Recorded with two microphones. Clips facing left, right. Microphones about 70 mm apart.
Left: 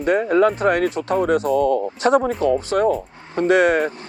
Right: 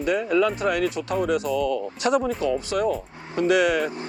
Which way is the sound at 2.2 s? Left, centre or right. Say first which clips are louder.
Left 5 dB; left.